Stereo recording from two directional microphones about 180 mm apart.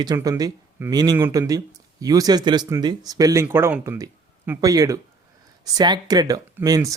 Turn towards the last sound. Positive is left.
turn(degrees=-20)  # may be behind; listen again after turning